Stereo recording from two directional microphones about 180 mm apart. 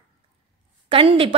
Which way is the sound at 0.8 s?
30° right (ahead or behind).